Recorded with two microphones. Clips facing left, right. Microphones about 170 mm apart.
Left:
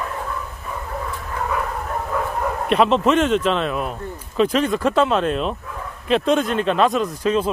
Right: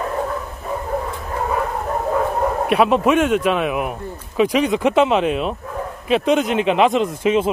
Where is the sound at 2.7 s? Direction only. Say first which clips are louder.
Even; 10° right (ahead or behind).